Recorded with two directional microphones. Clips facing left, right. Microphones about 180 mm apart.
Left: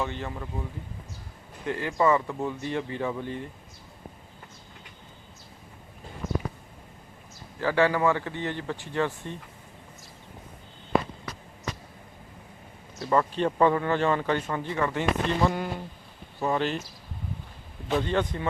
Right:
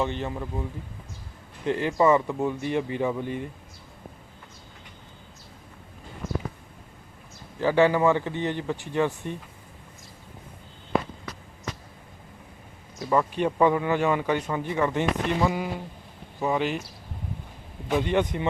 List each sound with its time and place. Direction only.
0.0 s speech: 20° right (ahead or behind)
1.6 s speech: 20° right (ahead or behind)
7.6 s speech: 20° right (ahead or behind)
13.0 s speech: 10° right (ahead or behind)
15.4 s speech: 5° right (ahead or behind)
17.8 s speech: 15° right (ahead or behind)